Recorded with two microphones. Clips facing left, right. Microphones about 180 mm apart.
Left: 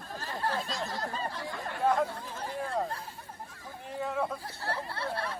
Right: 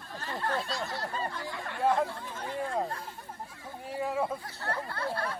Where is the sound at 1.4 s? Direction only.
Centre (ahead or behind).